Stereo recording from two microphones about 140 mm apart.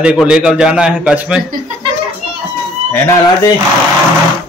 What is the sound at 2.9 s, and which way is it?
Speech, 20° left (ahead or behind).